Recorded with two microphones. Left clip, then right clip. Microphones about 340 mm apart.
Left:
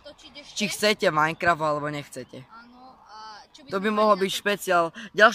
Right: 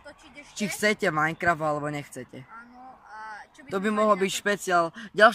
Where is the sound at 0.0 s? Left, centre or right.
Centre.